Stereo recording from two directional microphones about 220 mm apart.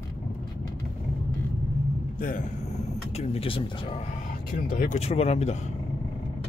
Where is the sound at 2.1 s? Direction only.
40° left (ahead or behind).